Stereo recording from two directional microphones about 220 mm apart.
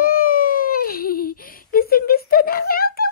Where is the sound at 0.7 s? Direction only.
45° left (ahead or behind).